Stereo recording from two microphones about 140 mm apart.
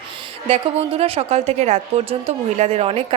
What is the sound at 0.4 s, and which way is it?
A woman's voice, 45° right (ahead or behind).